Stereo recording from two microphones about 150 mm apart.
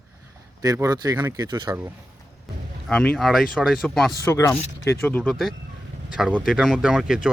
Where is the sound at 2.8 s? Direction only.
5° left (ahead or behind).